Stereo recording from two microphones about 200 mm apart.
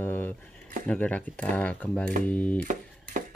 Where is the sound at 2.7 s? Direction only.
40° right (ahead or behind).